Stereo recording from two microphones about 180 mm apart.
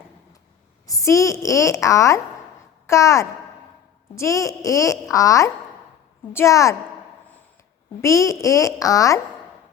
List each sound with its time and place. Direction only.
0.9 s a woman's voice: 15° left (ahead or behind)
8.0 s a woman's voice: 15° left (ahead or behind)